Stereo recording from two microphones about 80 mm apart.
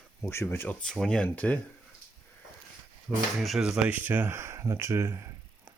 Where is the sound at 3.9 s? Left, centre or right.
Right.